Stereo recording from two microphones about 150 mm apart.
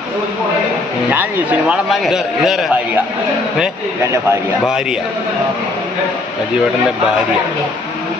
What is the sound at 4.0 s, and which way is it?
Speech, 20° right (ahead or behind).